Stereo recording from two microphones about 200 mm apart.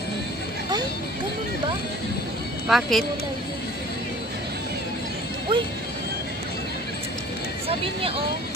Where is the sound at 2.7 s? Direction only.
Centre (ahead or behind).